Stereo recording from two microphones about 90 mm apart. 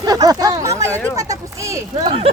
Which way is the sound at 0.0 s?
45° right (ahead or behind).